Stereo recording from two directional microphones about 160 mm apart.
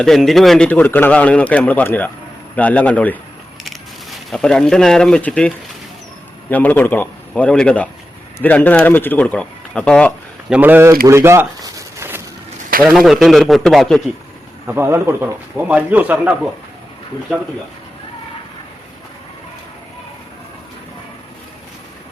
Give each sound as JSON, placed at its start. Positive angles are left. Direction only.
{"t": 0.0, "sound": "a man's voice", "side_deg": 0}
{"t": 10.5, "sound": "speech", "side_deg": -10}
{"t": 11.0, "sound": "a sound", "side_deg": -15}
{"t": 12.8, "sound": "speech", "side_deg": 0}
{"t": 14.7, "sound": "speech", "side_deg": -15}